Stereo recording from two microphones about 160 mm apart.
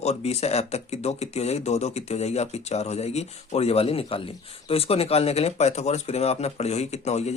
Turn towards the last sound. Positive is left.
turn(degrees=45)  # may be behind; listen again after turning